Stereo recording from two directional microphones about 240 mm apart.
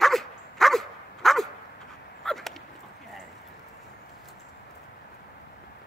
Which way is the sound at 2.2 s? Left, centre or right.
Centre.